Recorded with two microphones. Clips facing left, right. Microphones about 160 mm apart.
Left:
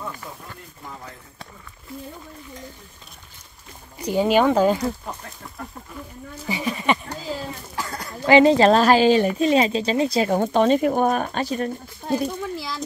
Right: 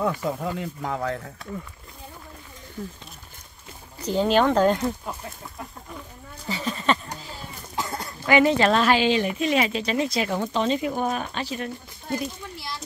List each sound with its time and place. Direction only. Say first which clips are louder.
0.0 s speech: right 10 dB; 90° right
4.0 s speech: left 2 dB; 10° left (ahead or behind)
6.4 s a sound: left 2 dB; 10° left (ahead or behind)
7.7 s a sound: right 4 dB; 25° right (ahead or behind)
8.3 s a woman's voice: left 5 dB; 30° left (ahead or behind)
10.4 s speech: left 8 dB; 50° left (ahead or behind)
12.0 s a child's voice: left 5 dB; 90° left